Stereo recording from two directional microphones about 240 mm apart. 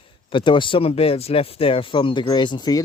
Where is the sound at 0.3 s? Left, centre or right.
Left.